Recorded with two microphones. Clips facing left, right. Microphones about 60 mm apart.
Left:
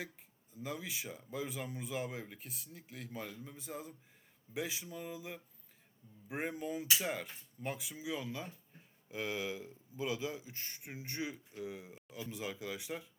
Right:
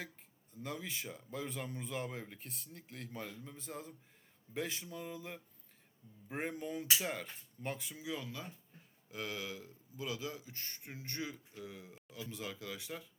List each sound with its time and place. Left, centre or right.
0.5 s speech: centre
8.2 s speech: left